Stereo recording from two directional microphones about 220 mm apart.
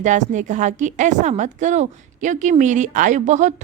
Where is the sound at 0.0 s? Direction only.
35° right (ahead or behind).